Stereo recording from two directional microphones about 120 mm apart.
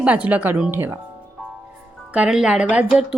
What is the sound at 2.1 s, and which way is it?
Speech, 5° right (ahead or behind).